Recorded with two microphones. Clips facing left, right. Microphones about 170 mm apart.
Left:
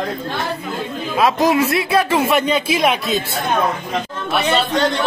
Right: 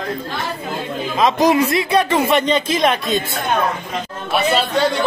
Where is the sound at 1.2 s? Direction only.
5° left (ahead or behind).